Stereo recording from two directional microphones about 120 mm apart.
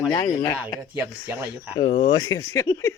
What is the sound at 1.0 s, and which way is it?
Speech, 20° right (ahead or behind).